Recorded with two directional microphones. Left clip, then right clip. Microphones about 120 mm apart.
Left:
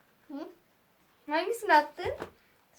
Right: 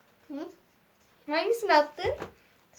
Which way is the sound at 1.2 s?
10° right (ahead or behind).